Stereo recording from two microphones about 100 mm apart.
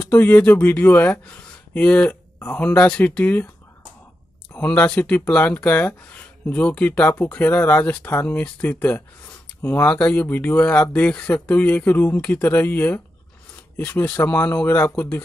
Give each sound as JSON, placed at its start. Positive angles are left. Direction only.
{"t": 0.1, "sound": "speech", "side_deg": 15}
{"t": 4.6, "sound": "speech", "side_deg": 10}